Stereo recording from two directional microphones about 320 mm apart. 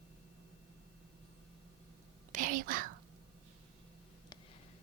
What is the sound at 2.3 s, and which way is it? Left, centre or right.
Speech, right.